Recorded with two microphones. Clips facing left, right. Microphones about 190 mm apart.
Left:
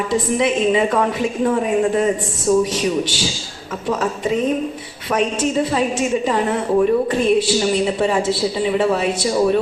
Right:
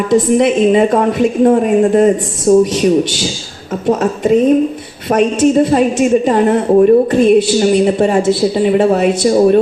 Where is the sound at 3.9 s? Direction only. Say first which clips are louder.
Right 8 dB; 45° right (ahead or behind).